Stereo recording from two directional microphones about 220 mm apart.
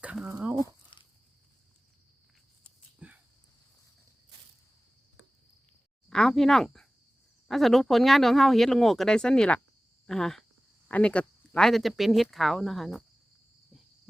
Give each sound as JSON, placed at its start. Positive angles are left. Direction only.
{"t": 0.0, "sound": "speech", "side_deg": -5}
{"t": 0.9, "sound": "walk", "side_deg": 20}
{"t": 3.0, "sound": "a sound", "side_deg": -5}
{"t": 6.1, "sound": "speech", "side_deg": 5}